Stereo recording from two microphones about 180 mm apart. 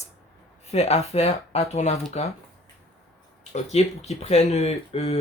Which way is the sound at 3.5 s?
35° left (ahead or behind).